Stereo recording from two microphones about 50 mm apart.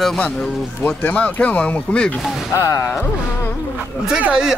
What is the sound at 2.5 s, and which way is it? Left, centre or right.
Speech, left.